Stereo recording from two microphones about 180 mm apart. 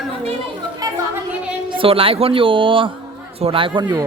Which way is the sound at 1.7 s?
30° right (ahead or behind).